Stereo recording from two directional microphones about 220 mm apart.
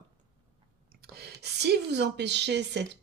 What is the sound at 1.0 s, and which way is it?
A woman's voice, 45° right (ahead or behind).